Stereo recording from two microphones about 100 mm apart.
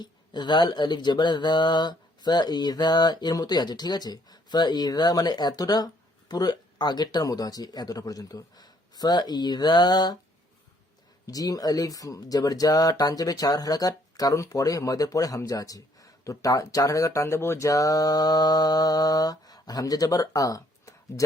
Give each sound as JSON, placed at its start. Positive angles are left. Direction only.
{"t": 0.0, "sound": "speech", "side_deg": 50}
{"t": 11.3, "sound": "speech", "side_deg": 40}